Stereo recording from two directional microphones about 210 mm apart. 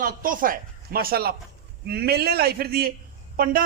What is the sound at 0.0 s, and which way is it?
A man's voice, 40° right (ahead or behind).